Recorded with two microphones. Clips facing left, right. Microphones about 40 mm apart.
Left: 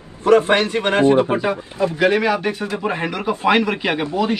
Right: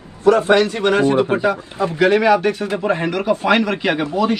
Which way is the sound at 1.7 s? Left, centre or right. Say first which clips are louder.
Even; right.